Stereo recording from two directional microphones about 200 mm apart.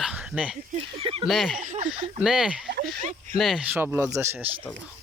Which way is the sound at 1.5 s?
35° right (ahead or behind).